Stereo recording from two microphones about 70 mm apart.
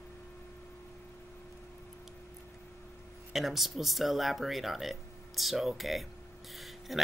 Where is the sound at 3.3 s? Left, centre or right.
Centre.